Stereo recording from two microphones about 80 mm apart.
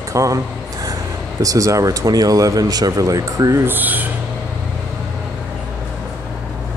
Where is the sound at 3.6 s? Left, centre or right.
Right.